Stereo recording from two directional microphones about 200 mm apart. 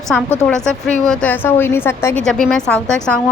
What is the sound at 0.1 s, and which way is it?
A woman's voice, 5° left (ahead or behind).